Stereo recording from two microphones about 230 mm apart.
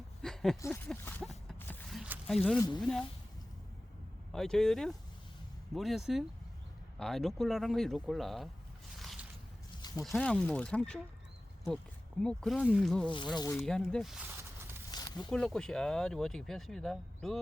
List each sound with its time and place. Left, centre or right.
0.2 s a sound: centre
2.9 s speech: centre
4.3 s speech: centre
9.0 s squish: centre
9.9 s speech: centre
12.2 s speech: centre
13.1 s speech: centre
14.8 s a sound: centre
15.3 s speech: centre